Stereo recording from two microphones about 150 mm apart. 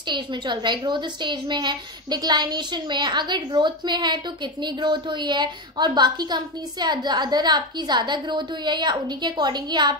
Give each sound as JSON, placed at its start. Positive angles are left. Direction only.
{"t": 0.1, "sound": "a woman's voice", "side_deg": -30}